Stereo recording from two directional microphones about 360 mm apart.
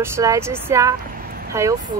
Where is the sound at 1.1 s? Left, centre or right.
Right.